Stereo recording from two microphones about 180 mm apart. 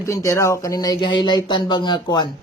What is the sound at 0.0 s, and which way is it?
A man's voice, 15° left (ahead or behind).